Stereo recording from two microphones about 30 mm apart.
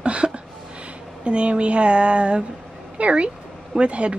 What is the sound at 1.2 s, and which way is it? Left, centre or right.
Speech, right.